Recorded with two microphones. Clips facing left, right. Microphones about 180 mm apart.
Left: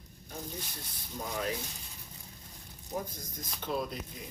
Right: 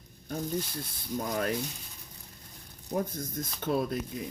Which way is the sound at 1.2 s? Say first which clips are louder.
Right 4 dB; 55° right (ahead or behind).